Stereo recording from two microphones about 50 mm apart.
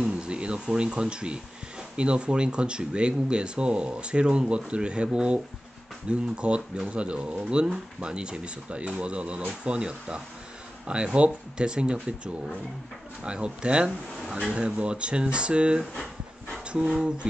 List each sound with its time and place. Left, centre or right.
0.0 s a sound: centre
2.0 s speech: right
13.2 s speech: right
15.9 s dog: centre
16.6 s speech: right